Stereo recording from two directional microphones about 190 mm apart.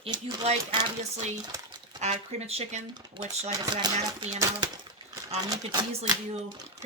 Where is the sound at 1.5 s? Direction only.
20° right (ahead or behind).